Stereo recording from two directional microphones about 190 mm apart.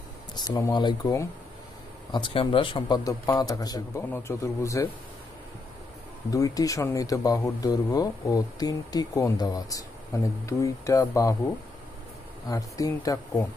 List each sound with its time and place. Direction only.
0.3 s a man's voice: 20° left (ahead or behind)
6.3 s speech: 20° left (ahead or behind)
12.4 s speech: 20° left (ahead or behind)